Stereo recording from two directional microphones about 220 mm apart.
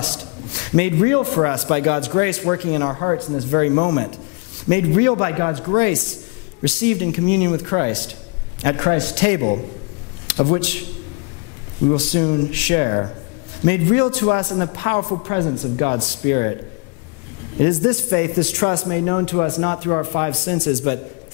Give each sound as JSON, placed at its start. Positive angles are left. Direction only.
{"t": 0.7, "sound": "a man's voice", "side_deg": 15}
{"t": 12.0, "sound": "a man's voice", "side_deg": 10}
{"t": 17.6, "sound": "a man's voice", "side_deg": 15}
{"t": 20.6, "sound": "a man's voice", "side_deg": 10}